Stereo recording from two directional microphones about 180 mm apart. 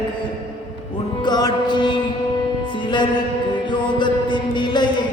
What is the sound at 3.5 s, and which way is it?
Chant, 25° left (ahead or behind).